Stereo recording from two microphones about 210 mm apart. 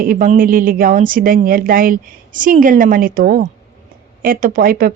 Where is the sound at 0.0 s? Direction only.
40° right (ahead or behind).